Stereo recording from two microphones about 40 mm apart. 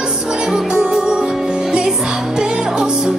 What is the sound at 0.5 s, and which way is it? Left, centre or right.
Music, centre.